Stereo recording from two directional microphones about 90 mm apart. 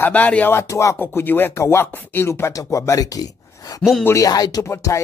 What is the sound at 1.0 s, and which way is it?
Speech, 25° left (ahead or behind).